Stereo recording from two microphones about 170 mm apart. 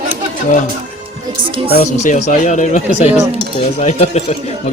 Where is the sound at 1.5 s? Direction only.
30° right (ahead or behind).